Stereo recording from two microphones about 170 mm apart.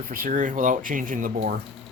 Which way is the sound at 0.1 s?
55° right (ahead or behind).